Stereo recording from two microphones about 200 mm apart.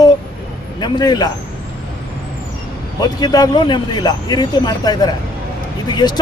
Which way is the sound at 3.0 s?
20° left (ahead or behind).